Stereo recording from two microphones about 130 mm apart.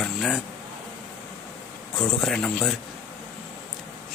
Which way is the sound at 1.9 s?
5° left (ahead or behind).